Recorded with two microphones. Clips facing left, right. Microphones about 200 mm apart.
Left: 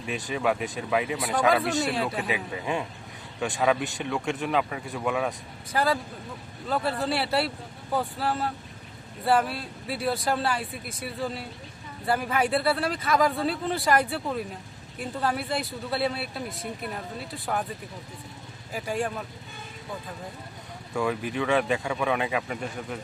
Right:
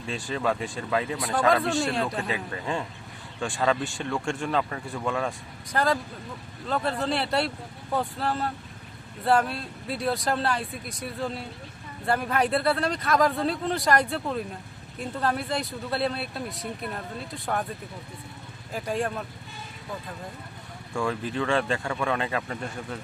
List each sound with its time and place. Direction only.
0.0 s speech: 15° left (ahead or behind); by 17.7 s centre (ahead or behind)
18.7 s speech: centre (ahead or behind)
20.9 s speech: 10° left (ahead or behind)